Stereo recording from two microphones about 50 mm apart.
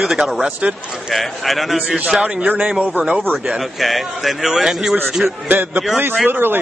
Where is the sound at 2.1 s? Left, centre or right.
Right.